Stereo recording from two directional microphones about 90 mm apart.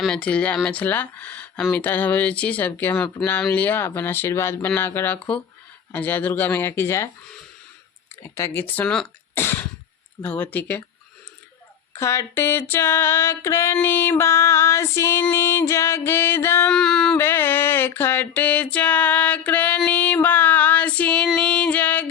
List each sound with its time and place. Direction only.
0.1 s speech: 15° left (ahead or behind)
1.7 s music: 20° left (ahead or behind)
8.2 s music: 25° left (ahead or behind)
9.3 s a sound: 25° left (ahead or behind)
10.2 s music: 20° left (ahead or behind)
11.9 s music: 30° left (ahead or behind)
16.6 s speech: 10° left (ahead or behind)
17.2 s music: 25° left (ahead or behind)
19.9 s female singing: 15° left (ahead or behind)
21.3 s music: 10° left (ahead or behind)